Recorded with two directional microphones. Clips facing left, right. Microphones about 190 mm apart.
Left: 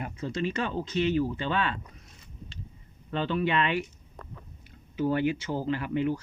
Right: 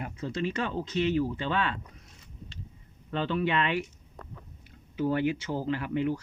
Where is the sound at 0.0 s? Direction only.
25° left (ahead or behind).